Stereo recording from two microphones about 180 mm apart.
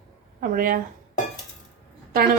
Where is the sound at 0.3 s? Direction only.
55° right (ahead or behind).